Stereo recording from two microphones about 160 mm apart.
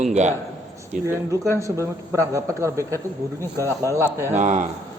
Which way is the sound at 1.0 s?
20° right (ahead or behind).